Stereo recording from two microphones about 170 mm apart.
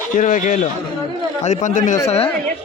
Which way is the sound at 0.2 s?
50° left (ahead or behind).